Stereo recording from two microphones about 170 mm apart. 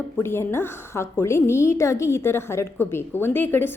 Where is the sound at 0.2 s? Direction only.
15° left (ahead or behind).